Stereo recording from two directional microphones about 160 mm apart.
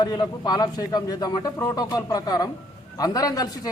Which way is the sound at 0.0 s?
30° left (ahead or behind).